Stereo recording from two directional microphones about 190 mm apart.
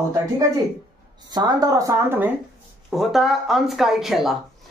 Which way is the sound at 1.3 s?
20° right (ahead or behind).